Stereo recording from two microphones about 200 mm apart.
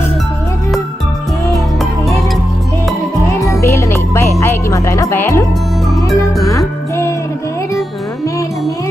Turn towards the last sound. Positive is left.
turn(degrees=15)  # may be behind; listen again after turning